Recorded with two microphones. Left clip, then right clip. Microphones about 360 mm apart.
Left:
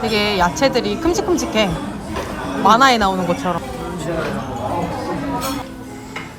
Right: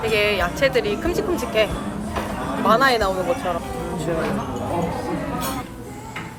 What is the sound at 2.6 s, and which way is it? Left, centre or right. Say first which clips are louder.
Speech: left 5 dB; centre.